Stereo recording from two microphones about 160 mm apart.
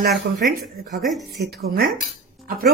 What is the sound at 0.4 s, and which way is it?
Speech, 65° right (ahead or behind).